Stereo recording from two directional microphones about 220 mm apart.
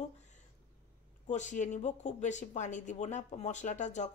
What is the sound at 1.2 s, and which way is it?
A woman's voice, 35° left (ahead or behind).